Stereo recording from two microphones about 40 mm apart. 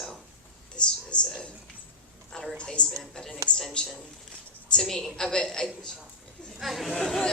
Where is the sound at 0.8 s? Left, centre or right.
Left.